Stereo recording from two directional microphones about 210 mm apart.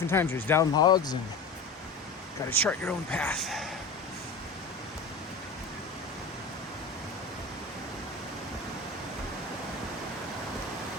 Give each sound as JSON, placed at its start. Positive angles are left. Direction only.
{"t": 0.1, "sound": "speech", "side_deg": 10}
{"t": 2.5, "sound": "speech", "side_deg": 10}